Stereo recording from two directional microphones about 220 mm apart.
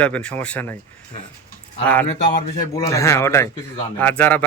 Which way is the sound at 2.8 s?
15° left (ahead or behind).